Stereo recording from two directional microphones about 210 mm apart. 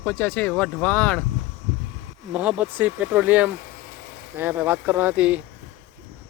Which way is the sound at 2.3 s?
5° right (ahead or behind).